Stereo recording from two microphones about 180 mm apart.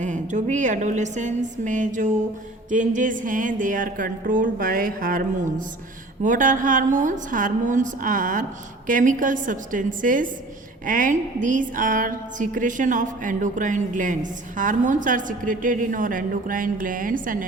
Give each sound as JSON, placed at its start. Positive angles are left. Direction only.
{"t": 0.0, "sound": "a woman's voice", "side_deg": -45}